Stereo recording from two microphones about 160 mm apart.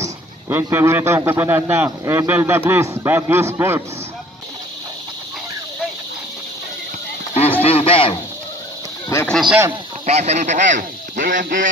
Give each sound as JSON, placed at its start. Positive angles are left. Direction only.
{"t": 0.0, "sound": "a man's voice", "side_deg": -15}
{"t": 7.6, "sound": "radio", "side_deg": 35}
{"t": 9.3, "sound": "speech", "side_deg": -5}
{"t": 10.0, "sound": "speech", "side_deg": -40}